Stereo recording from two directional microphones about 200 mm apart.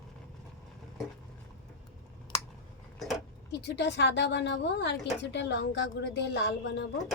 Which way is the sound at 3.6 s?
60° left (ahead or behind).